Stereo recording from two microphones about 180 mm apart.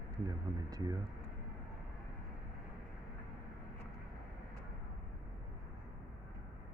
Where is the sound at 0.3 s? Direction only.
20° right (ahead or behind).